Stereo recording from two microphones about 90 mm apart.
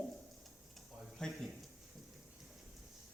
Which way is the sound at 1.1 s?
5° left (ahead or behind).